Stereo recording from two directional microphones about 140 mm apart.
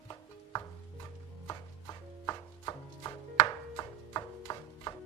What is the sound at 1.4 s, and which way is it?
Chopping, 25° left (ahead or behind).